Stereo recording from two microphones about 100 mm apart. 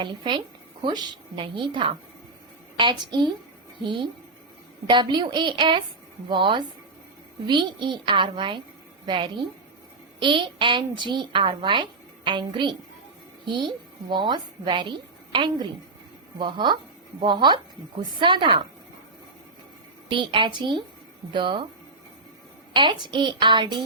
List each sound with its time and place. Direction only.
0.0 s a woman's voice: 55° right (ahead or behind)
4.9 s a woman's voice: 55° right (ahead or behind)
20.1 s a woman's voice: 55° right (ahead or behind)
22.7 s a woman's voice: 50° right (ahead or behind)